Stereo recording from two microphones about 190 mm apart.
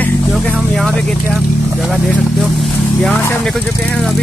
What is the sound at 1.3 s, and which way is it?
Speech, centre (ahead or behind).